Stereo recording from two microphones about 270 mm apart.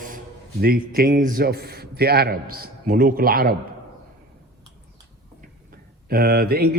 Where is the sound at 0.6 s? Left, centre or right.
Right.